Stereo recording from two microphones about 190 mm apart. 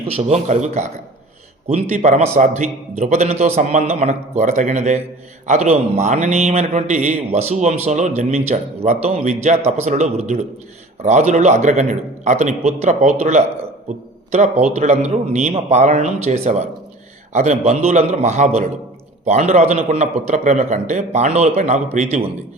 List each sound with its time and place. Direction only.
0.1 s a man's voice: 35° right (ahead or behind)